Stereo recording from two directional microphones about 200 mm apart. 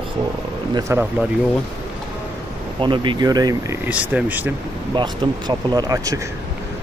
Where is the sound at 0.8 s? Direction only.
15° right (ahead or behind).